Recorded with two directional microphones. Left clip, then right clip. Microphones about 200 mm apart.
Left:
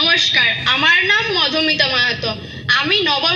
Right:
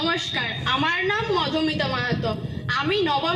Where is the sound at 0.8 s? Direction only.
45° left (ahead or behind).